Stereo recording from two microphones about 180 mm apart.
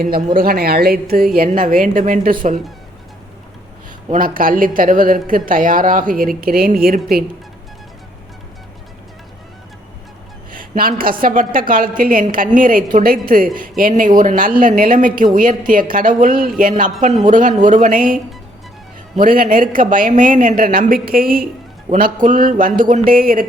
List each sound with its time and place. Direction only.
0.0 s a woman's voice: 50° right (ahead or behind)
4.1 s speech: 50° right (ahead or behind)
10.5 s speech: 50° right (ahead or behind)